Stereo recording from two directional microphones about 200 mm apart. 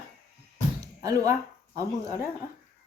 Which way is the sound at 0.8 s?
15° right (ahead or behind).